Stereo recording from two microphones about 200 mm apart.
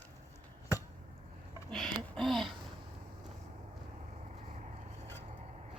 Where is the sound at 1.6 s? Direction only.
Centre (ahead or behind).